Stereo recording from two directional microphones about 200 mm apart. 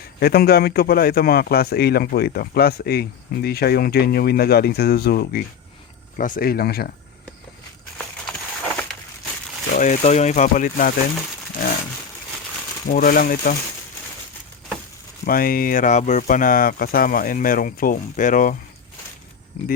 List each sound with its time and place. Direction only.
0.2 s a man's voice: 50° left (ahead or behind)
7.9 s a sound: 5° left (ahead or behind)
9.7 s speech: 35° left (ahead or behind)
12.9 s a man's voice: 45° left (ahead or behind)
15.2 s a man's voice: 45° left (ahead or behind)